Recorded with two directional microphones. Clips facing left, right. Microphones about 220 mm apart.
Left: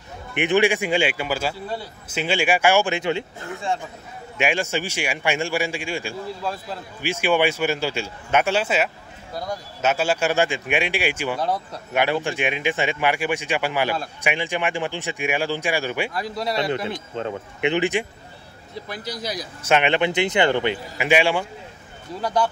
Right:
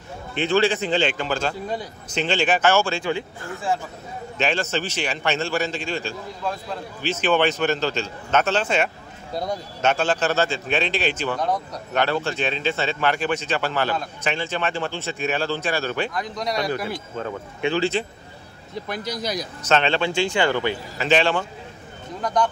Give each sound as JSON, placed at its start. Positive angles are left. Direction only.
{"t": 0.3, "sound": "a man's voice", "side_deg": 15}
{"t": 3.7, "sound": "a man's voice", "side_deg": 0}
{"t": 4.4, "sound": "a man's voice", "side_deg": 10}
{"t": 16.4, "sound": "speech", "side_deg": 25}
{"t": 19.6, "sound": "a man's voice", "side_deg": 15}